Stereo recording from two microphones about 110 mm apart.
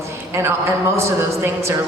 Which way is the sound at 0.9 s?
25° right (ahead or behind).